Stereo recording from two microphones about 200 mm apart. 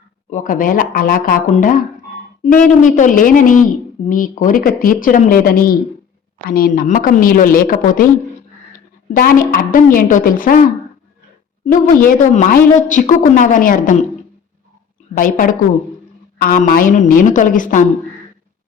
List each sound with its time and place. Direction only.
0.3 s a woman's voice: 40° left (ahead or behind)
9.1 s a woman's voice: 45° left (ahead or behind)
15.2 s a woman's voice: 45° left (ahead or behind)